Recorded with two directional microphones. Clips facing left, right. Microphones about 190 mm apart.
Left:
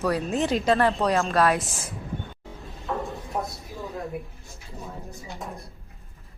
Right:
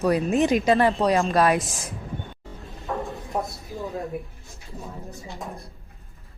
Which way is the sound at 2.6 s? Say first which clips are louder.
Even; centre (ahead or behind).